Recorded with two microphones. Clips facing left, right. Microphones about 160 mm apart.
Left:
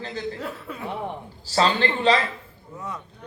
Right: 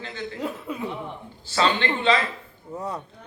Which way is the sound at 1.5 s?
35° left (ahead or behind).